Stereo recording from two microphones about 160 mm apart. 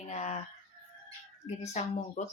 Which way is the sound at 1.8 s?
45° left (ahead or behind).